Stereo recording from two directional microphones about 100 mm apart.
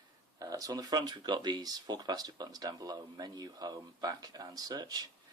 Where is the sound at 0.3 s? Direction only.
35° right (ahead or behind).